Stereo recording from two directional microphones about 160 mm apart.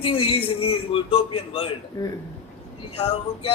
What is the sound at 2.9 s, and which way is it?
Speech, 35° left (ahead or behind).